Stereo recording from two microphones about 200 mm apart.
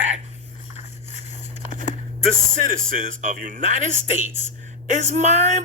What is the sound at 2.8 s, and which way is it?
Speech, 40° right (ahead or behind).